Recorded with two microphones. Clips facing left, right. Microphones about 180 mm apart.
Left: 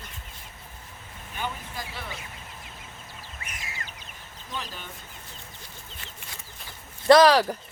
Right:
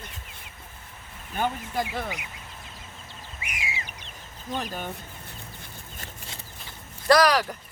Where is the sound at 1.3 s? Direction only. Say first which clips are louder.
Right 7 dB; 50° right (ahead or behind).